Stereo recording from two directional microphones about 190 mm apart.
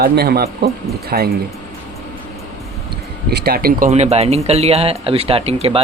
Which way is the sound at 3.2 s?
55° right (ahead or behind).